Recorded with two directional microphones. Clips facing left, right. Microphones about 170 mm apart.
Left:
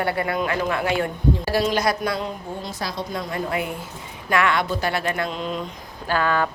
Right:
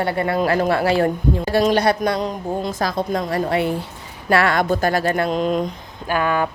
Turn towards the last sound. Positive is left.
turn(degrees=-15)  # may be behind; listen again after turning